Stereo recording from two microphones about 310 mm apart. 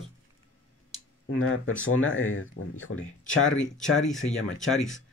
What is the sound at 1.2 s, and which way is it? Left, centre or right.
Speech, left.